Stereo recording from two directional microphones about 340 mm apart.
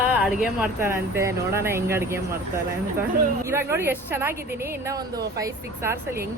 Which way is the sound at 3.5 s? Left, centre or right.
Centre.